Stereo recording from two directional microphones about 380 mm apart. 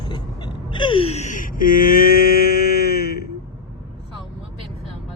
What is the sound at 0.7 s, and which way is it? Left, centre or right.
Wail, centre.